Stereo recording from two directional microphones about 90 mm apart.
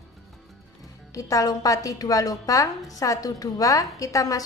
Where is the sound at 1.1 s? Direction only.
40° left (ahead or behind).